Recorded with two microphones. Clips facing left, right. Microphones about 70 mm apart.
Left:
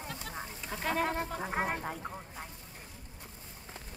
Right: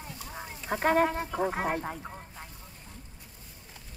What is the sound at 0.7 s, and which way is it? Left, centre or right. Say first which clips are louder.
Speech: right 8 dB; right.